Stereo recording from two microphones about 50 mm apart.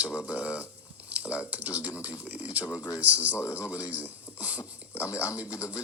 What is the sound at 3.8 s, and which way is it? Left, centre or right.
Speech, right.